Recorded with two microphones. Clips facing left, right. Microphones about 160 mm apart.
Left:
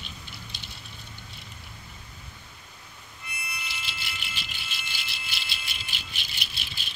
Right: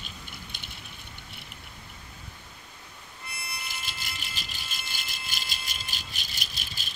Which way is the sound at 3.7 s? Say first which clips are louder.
Even; 45° right (ahead or behind).